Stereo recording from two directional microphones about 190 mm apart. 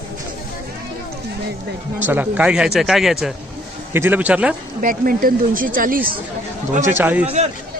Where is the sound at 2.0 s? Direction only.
10° right (ahead or behind).